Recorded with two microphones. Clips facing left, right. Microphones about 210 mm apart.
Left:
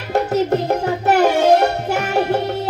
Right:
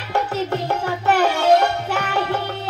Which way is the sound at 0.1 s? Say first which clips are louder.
Left 6 dB; 40° left (ahead or behind).